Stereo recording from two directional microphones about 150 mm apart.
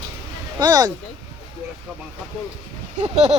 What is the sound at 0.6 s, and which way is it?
Speech, 25° right (ahead or behind).